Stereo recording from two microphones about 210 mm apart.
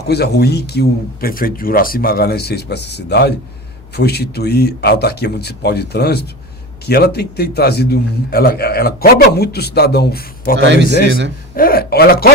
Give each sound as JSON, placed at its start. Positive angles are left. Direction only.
{"t": 0.1, "sound": "a man's voice", "side_deg": 50}
{"t": 10.6, "sound": "a man's voice", "side_deg": -60}
{"t": 11.5, "sound": "a man's voice", "side_deg": 45}